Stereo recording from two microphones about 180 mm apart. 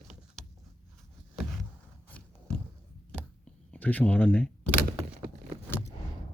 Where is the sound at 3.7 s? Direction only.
10° left (ahead or behind).